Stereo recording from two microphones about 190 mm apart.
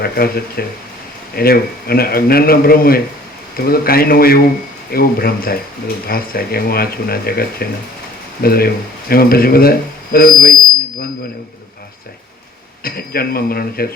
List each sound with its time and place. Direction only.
0.0 s speech: 55° left (ahead or behind)
12.8 s speech: 50° left (ahead or behind)